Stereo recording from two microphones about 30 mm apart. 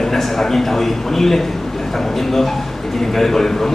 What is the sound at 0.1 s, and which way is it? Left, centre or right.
A man's voice, centre.